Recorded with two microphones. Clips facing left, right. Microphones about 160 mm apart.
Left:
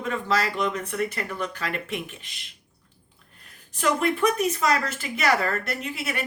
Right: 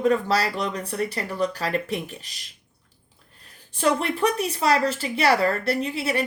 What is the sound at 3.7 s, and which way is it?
Speech, 30° right (ahead or behind).